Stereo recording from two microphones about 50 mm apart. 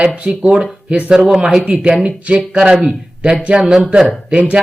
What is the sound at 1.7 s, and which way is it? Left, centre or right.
A man's voice, centre.